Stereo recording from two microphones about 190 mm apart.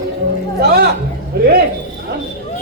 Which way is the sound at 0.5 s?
55° right (ahead or behind).